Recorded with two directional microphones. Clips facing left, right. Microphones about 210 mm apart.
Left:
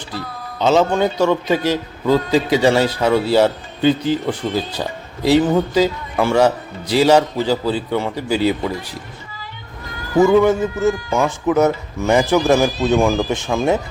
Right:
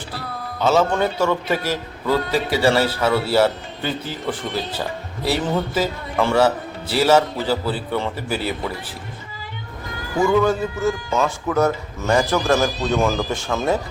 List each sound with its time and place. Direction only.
0.6 s a man's voice: 20° left (ahead or behind)
10.2 s a man's voice: 20° left (ahead or behind)